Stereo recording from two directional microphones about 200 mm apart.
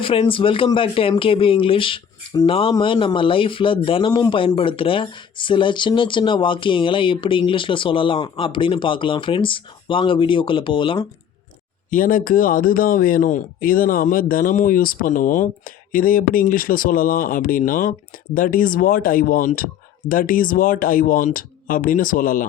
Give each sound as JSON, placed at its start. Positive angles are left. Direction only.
{"t": 0.0, "sound": "speech", "side_deg": 25}
{"t": 11.9, "sound": "speech", "side_deg": 45}